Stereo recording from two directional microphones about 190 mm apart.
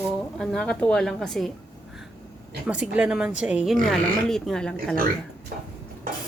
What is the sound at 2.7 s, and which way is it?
Speech, 5° right (ahead or behind).